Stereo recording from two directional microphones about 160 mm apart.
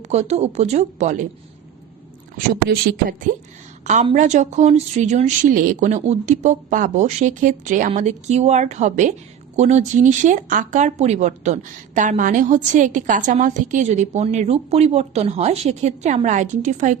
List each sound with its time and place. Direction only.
0.1 s speech: 45° right (ahead or behind)
2.6 s speech: 65° right (ahead or behind)
4.1 s speech: 50° right (ahead or behind)